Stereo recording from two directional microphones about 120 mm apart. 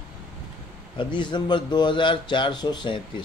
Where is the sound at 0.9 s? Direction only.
40° left (ahead or behind).